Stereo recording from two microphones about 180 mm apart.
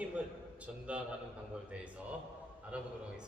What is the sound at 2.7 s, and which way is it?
Speech, 5° right (ahead or behind).